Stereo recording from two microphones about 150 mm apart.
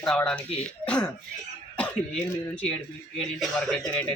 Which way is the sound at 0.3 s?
5° left (ahead or behind).